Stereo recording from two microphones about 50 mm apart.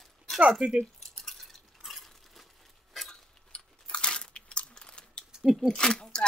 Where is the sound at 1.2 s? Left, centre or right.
Centre.